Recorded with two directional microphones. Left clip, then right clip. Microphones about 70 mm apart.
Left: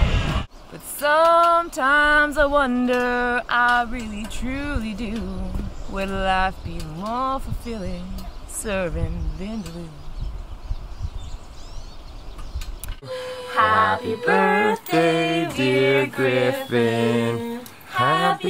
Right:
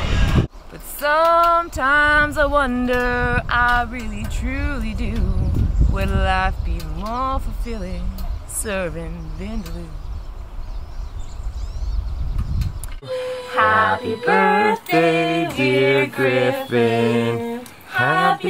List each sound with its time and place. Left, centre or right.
0.0 s a sound: right
0.7 s female singing: centre
7.0 s speech: centre
8.6 s female singing: centre
12.5 s music: centre
15.0 s music: centre
15.5 s female singing: centre
15.8 s music: centre
17.2 s a sound: centre
18.0 s speech: centre